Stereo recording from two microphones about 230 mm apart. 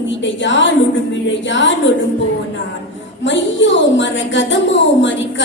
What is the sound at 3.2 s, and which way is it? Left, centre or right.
A woman's voice, left.